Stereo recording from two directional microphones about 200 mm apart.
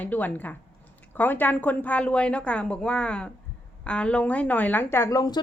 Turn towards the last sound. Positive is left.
turn(degrees=15)  # may be behind; listen again after turning